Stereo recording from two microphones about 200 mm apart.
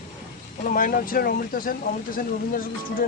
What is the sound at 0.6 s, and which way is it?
Speech, 45° left (ahead or behind).